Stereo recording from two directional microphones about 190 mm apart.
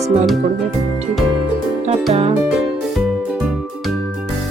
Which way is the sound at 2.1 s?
30° right (ahead or behind).